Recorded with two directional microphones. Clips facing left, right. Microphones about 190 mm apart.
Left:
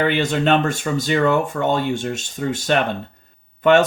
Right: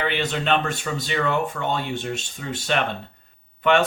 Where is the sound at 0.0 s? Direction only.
45° left (ahead or behind).